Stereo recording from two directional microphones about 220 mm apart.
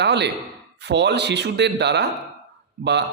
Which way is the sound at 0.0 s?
50° right (ahead or behind).